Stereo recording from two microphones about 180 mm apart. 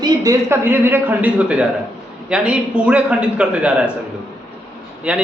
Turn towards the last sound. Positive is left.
turn(degrees=-5)  # may be behind; listen again after turning